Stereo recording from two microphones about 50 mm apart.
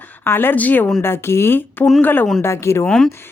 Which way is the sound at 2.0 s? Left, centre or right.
Left.